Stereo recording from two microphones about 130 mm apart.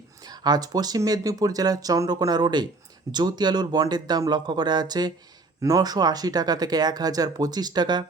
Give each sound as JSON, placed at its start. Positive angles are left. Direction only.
{"t": 0.3, "sound": "speech", "side_deg": -30}